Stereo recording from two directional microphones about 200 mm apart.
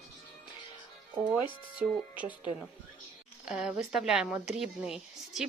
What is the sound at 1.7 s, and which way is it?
Speech, 5° right (ahead or behind).